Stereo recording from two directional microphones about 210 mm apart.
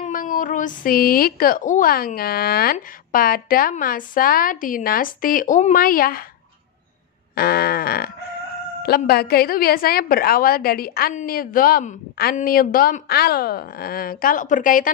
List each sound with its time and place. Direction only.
0.0 s a woman's voice: 40° left (ahead or behind)
7.3 s a woman's voice: 45° left (ahead or behind)